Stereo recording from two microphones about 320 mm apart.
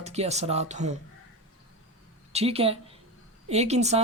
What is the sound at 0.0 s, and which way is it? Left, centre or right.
Speech, centre.